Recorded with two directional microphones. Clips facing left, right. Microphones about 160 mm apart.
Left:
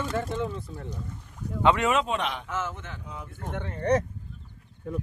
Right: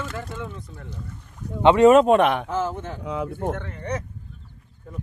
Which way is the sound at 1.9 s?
50° right (ahead or behind).